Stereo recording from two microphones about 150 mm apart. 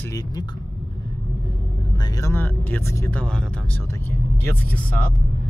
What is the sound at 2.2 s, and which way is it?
Speech, 15° left (ahead or behind).